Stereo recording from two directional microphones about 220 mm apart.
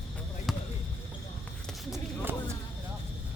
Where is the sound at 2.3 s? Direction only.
10° right (ahead or behind).